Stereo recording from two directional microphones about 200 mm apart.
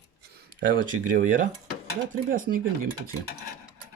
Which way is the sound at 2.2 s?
45° right (ahead or behind).